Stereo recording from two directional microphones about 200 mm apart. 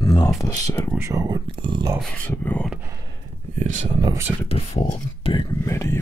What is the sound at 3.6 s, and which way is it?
Speech, 35° right (ahead or behind).